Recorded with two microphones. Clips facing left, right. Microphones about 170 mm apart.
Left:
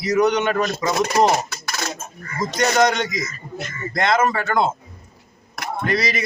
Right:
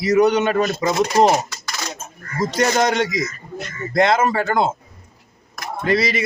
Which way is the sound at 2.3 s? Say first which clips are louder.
Even; 30° right (ahead or behind).